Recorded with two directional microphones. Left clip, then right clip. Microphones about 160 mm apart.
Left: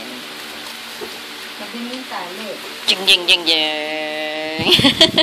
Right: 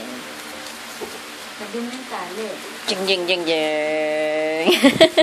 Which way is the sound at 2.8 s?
30° right (ahead or behind).